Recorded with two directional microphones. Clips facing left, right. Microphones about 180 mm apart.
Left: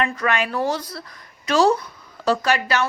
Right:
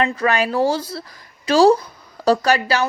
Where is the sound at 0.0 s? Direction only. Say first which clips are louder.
Right 3 dB; 35° right (ahead or behind).